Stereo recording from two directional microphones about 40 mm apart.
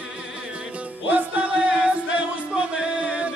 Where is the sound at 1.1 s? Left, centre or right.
Right.